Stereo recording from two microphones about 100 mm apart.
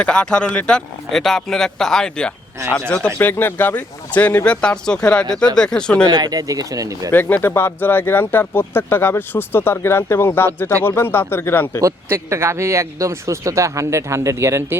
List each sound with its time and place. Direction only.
0.0 s speech: 10° left (ahead or behind)
3.2 s speech: 20° left (ahead or behind)
6.1 s speech: 40° right (ahead or behind)
7.1 s speech: 20° left (ahead or behind)
12.0 s speech: 25° right (ahead or behind)